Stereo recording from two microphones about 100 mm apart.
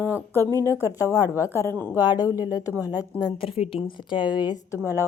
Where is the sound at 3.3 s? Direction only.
65° left (ahead or behind).